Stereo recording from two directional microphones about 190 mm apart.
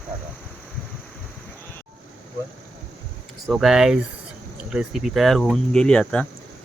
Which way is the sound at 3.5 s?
Centre (ahead or behind).